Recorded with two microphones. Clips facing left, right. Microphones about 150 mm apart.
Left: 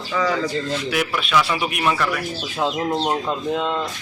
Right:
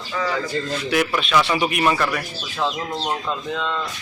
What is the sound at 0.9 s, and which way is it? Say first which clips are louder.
Speech: right 2 dB; 5° left (ahead or behind).